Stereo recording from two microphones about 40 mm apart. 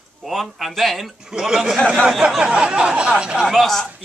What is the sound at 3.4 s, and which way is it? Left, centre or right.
Speech, centre.